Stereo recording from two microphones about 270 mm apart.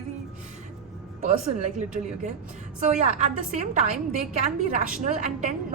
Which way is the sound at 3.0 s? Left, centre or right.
Right.